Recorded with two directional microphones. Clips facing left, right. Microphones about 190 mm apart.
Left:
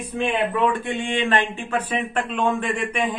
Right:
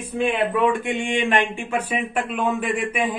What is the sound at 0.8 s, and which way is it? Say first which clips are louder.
Speech: right 1 dB; 15° right (ahead or behind).